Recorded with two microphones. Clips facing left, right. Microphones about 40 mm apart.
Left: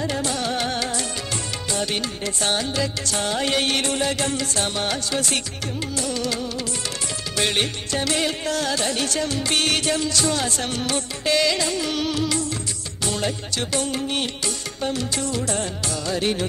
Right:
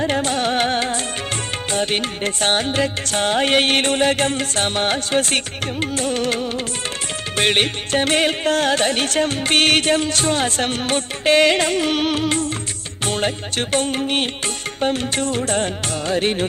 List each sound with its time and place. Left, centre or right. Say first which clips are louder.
0.0 s music: right 5 dB; right